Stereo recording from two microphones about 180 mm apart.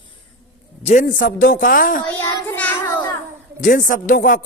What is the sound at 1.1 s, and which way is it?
Speech, 70° left (ahead or behind).